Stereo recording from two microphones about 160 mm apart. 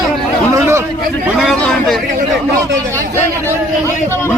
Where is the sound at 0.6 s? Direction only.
15° right (ahead or behind).